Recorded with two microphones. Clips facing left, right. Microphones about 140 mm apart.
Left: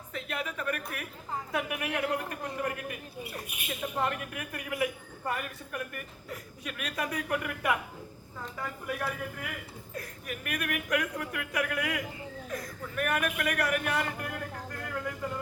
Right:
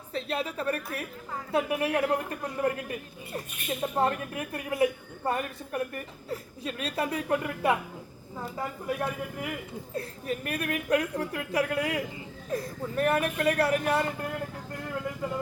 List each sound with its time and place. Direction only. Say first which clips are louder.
0.1 s speech: right 5 dB; 30° right (ahead or behind)